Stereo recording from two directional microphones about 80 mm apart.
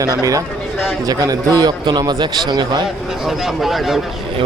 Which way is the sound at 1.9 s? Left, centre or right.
Right.